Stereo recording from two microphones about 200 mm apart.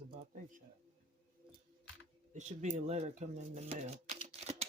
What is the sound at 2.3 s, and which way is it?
Speech, 35° right (ahead or behind).